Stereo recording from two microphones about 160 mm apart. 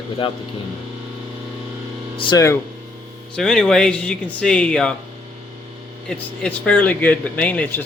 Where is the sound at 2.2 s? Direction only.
30° left (ahead or behind).